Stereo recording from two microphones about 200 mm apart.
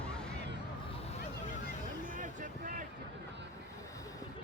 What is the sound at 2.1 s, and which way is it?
Music, 40° right (ahead or behind).